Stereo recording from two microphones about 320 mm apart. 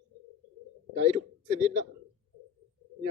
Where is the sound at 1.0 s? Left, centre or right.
Centre.